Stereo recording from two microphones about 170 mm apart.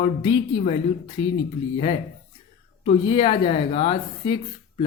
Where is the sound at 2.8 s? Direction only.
30° left (ahead or behind).